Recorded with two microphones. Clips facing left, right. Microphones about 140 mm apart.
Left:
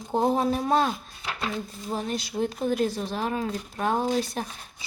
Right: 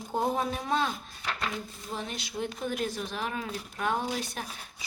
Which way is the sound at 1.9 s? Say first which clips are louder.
Left 7 dB; 40° left (ahead or behind).